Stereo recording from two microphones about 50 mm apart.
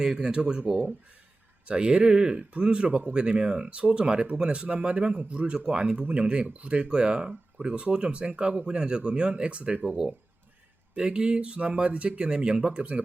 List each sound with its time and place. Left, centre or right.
0.0 s speech: centre
1.6 s speech: centre
10.9 s speech: right